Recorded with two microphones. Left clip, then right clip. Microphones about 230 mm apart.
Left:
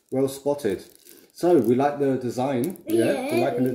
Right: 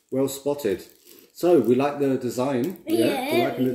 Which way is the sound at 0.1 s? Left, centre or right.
Centre.